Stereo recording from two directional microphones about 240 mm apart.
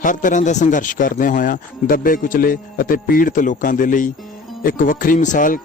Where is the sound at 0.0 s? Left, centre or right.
Left.